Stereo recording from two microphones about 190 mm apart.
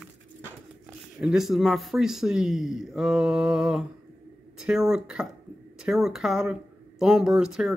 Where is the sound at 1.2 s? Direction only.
Centre (ahead or behind).